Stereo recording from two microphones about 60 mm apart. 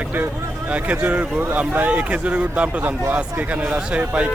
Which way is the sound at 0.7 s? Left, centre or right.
Right.